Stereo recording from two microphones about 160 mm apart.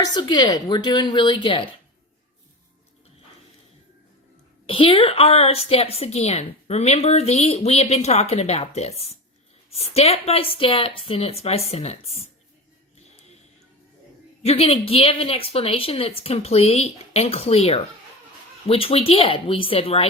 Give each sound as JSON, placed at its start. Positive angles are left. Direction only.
{"t": 0.0, "sound": "a woman's voice", "side_deg": 25}
{"t": 4.6, "sound": "a woman's voice", "side_deg": 35}
{"t": 14.4, "sound": "a woman's voice", "side_deg": 35}